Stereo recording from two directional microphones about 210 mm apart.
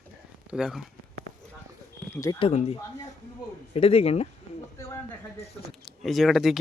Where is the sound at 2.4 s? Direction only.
30° left (ahead or behind).